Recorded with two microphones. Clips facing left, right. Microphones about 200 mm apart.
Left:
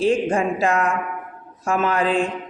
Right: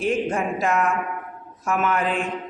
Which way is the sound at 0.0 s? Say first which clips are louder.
Left 4 dB; 30° left (ahead or behind).